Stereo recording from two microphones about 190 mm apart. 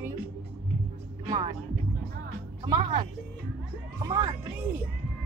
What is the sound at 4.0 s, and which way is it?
Speech, 20° right (ahead or behind).